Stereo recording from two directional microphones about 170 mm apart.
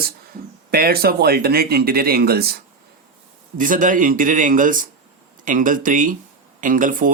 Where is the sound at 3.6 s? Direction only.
50° right (ahead or behind).